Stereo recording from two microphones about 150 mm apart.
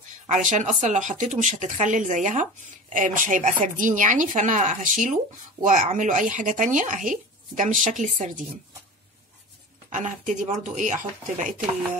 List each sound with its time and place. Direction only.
0.3 s speech: 55° right (ahead or behind)
9.8 s speech: 55° right (ahead or behind)